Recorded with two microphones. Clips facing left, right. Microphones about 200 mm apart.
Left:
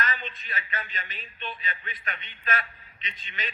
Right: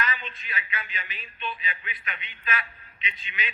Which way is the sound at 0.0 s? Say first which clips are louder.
Even; 45° left (ahead or behind).